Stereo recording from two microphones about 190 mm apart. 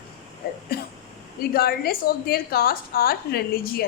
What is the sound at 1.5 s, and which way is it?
A woman's voice, 55° left (ahead or behind).